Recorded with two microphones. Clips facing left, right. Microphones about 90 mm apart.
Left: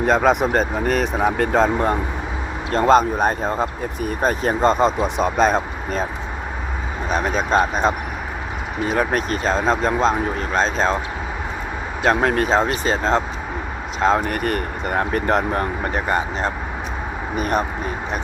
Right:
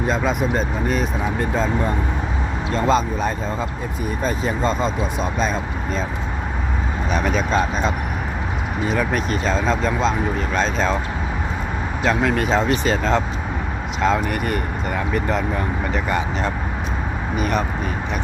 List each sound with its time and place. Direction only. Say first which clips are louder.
0.0 s speech: left 4 dB; 60° left (ahead or behind)
7.1 s speech: left 2 dB; 35° left (ahead or behind)
12.0 s speech: left 2 dB; 45° left (ahead or behind)